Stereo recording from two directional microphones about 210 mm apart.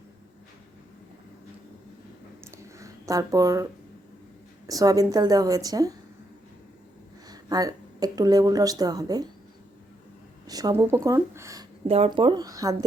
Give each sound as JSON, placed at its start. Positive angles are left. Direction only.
{"t": 2.4, "sound": "a sound", "side_deg": -15}
{"t": 4.6, "sound": "a woman's voice", "side_deg": -15}
{"t": 7.3, "sound": "a woman's voice", "side_deg": -20}
{"t": 10.4, "sound": "a woman's voice", "side_deg": -15}
{"t": 11.9, "sound": "speech", "side_deg": -30}